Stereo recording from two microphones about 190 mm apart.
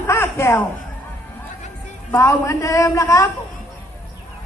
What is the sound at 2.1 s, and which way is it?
A man's voice, 15° left (ahead or behind).